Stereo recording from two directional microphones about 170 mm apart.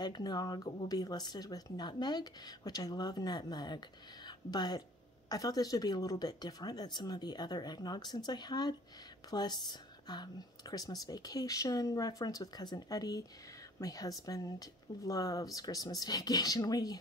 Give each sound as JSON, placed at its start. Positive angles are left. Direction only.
{"t": 0.0, "sound": "a woman's voice", "side_deg": 25}